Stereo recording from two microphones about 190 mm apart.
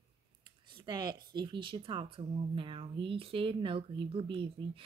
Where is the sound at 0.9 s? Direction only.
20° right (ahead or behind).